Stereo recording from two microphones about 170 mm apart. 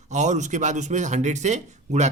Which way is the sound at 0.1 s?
45° right (ahead or behind).